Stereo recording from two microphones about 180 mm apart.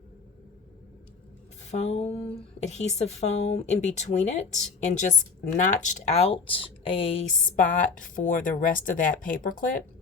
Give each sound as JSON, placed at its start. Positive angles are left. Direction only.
{"t": 1.7, "sound": "speech", "side_deg": 40}